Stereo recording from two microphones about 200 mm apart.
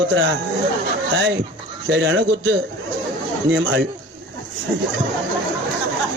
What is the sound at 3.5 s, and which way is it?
Speech, 60° right (ahead or behind).